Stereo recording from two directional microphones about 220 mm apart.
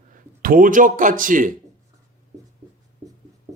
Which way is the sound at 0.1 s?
40° right (ahead or behind).